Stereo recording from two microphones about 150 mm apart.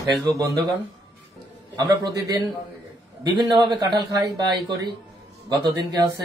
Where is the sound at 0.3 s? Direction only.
25° right (ahead or behind).